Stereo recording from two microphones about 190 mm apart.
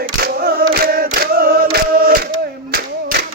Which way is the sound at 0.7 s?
50° right (ahead or behind).